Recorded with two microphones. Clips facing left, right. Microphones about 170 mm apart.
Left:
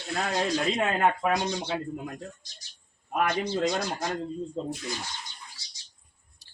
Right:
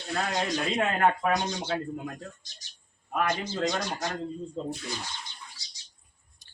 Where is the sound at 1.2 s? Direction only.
15° left (ahead or behind).